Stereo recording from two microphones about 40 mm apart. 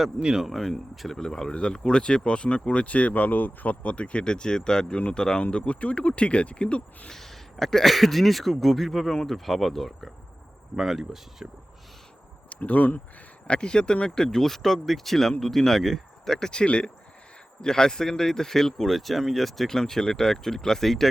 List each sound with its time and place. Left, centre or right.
0.2 s speech: centre
0.4 s speech: centre; by 7.1 s left
7.1 s speech: centre
12.5 s speech: left
13.5 s speech: left
14.3 s speech: centre
16.5 s speech: left
17.6 s speech: centre